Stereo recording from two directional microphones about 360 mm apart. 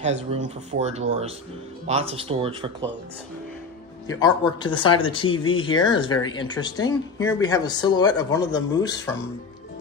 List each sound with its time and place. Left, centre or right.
0.0 s speech: centre
4.1 s speech: centre